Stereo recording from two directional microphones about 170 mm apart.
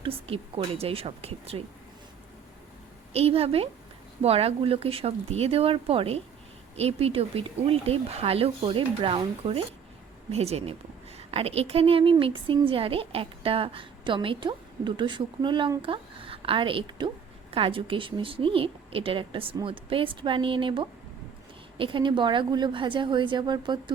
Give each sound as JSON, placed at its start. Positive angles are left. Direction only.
{"t": 0.0, "sound": "a woman's voice", "side_deg": -35}
{"t": 3.1, "sound": "a woman's voice", "side_deg": -35}